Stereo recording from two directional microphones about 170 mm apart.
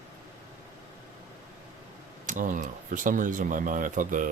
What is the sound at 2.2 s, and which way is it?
Speech, 50° right (ahead or behind).